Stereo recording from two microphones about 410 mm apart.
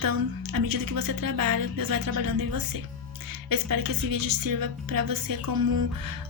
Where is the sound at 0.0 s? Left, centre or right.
Right.